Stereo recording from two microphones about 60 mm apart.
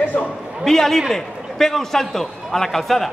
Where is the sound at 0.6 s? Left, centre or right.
Centre.